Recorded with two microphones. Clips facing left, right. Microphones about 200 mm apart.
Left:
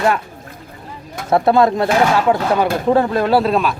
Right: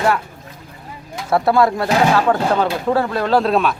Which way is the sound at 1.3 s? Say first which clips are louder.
Left 2 dB; 20° left (ahead or behind).